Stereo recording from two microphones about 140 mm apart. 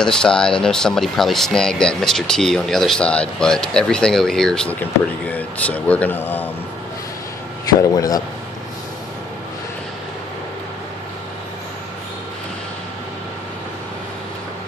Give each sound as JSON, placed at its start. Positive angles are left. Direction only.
{"t": 0.0, "sound": "speech", "side_deg": 5}
{"t": 7.9, "sound": "a man's voice", "side_deg": 25}